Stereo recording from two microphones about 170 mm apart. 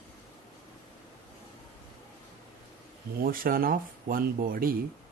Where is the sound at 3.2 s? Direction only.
60° right (ahead or behind).